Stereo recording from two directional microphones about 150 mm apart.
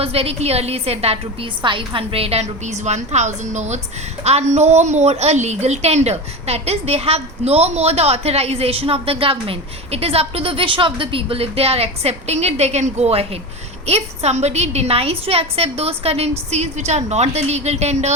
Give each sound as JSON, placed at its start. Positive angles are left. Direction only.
{"t": 0.0, "sound": "a woman's voice", "side_deg": -40}